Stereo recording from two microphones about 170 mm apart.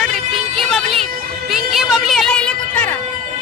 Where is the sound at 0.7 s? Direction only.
Centre (ahead or behind).